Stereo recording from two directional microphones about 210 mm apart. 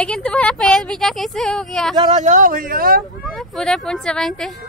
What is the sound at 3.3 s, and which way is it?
Speech, centre (ahead or behind).